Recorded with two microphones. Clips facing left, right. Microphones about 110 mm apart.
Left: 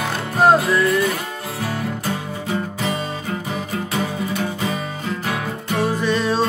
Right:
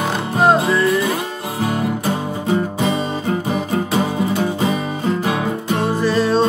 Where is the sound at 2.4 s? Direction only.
25° right (ahead or behind).